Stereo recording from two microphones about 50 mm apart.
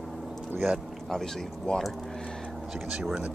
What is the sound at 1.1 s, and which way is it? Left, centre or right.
Speech, centre.